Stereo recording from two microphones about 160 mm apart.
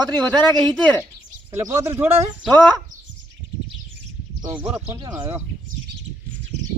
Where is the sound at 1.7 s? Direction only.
15° right (ahead or behind).